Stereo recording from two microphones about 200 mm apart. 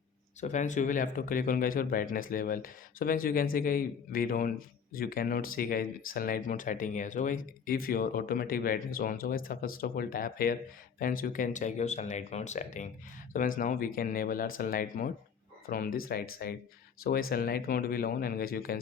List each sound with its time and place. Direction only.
0.4 s speech: 35° left (ahead or behind)